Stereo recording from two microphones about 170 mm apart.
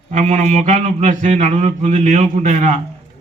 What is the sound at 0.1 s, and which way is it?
A man's voice, 45° right (ahead or behind).